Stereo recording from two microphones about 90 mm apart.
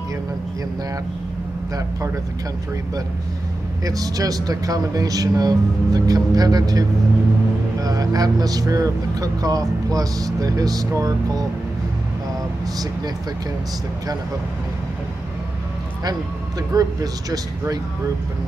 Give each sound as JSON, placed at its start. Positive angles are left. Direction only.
{"t": 3.8, "sound": "speech", "side_deg": -40}
{"t": 16.7, "sound": "speech", "side_deg": -45}